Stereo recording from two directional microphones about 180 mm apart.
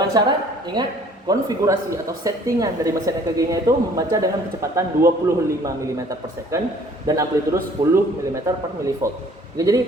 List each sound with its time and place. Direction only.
0.1 s a woman's voice: 25° right (ahead or behind)